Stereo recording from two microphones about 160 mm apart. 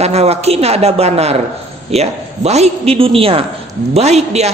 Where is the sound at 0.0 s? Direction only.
40° right (ahead or behind).